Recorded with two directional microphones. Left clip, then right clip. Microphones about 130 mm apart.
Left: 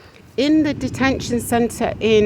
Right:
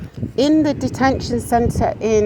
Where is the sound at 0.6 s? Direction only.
5° left (ahead or behind).